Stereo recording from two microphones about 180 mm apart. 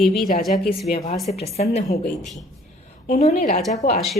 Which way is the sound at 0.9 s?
35° left (ahead or behind).